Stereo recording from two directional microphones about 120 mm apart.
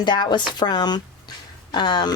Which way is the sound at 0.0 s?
40° left (ahead or behind).